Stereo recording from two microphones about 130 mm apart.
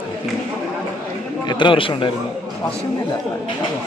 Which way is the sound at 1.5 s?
35° left (ahead or behind).